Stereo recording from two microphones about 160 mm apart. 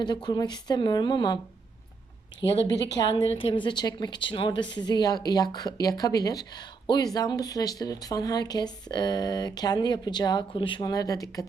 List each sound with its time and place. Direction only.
0.0 s a woman's voice: 30° left (ahead or behind)
2.6 s a woman's voice: 90° left
3.2 s a woman's voice: 35° left (ahead or behind)